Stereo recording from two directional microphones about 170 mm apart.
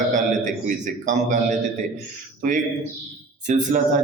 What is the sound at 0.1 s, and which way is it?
A man's voice, 50° right (ahead or behind).